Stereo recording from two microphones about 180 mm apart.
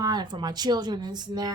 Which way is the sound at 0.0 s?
25° right (ahead or behind).